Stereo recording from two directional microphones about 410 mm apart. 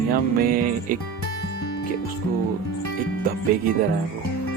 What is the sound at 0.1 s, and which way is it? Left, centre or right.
Music, right.